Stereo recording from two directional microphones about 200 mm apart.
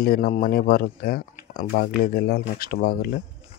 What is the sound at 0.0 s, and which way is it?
Speech, 45° left (ahead or behind).